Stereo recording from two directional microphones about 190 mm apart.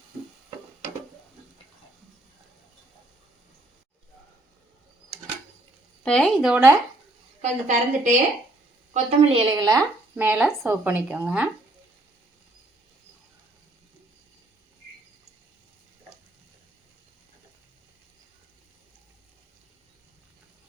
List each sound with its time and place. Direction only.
6.0 s speech: 5° left (ahead or behind)
7.4 s a woman's voice: 40° right (ahead or behind); by 11.4 s 5° right (ahead or behind)